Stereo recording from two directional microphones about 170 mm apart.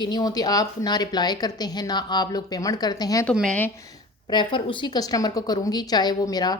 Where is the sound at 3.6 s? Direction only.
15° left (ahead or behind).